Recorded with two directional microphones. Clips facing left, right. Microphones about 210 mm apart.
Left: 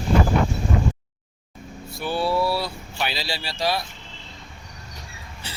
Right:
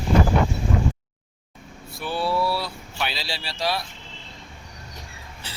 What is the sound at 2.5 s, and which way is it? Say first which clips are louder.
Speech: left 2 dB; centre (ahead or behind).